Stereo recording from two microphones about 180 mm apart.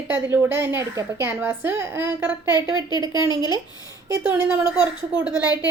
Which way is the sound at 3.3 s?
25° left (ahead or behind).